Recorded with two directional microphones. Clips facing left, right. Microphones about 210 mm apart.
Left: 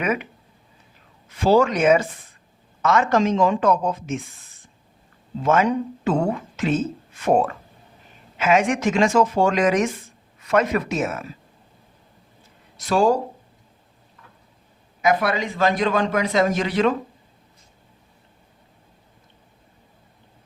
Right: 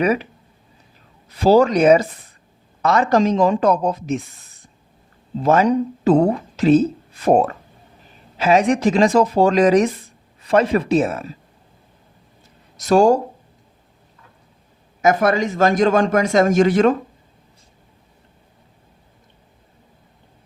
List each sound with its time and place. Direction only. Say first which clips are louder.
0.0 s speech: right 5 dB; 35° right (ahead or behind)
1.3 s speech: right 4 dB; 35° right (ahead or behind)
12.7 s speech: right 5 dB; 40° right (ahead or behind)
15.0 s a man's voice: right 4 dB; 45° right (ahead or behind)